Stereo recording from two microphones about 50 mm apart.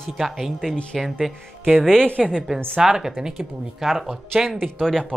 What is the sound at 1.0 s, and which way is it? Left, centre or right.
Speech, centre.